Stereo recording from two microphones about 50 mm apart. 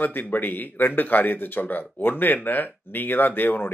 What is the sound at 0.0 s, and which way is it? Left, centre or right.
Speech, left.